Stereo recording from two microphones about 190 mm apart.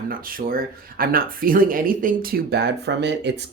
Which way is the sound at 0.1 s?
50° right (ahead or behind).